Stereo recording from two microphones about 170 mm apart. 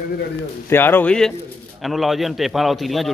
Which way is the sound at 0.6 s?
10° left (ahead or behind).